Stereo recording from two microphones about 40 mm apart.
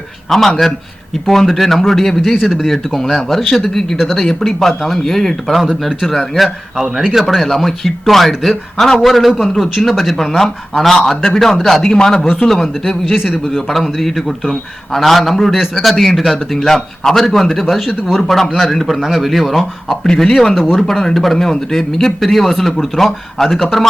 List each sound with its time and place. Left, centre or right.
0.3 s speech: centre
2.4 s speech: centre
2.6 s speech: centre
12.5 s speech: centre
16.7 s speech: centre
19.0 s speech: centre